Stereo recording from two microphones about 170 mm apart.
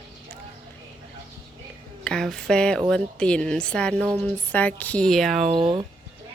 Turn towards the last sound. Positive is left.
turn(degrees=-30)  # may be behind; listen again after turning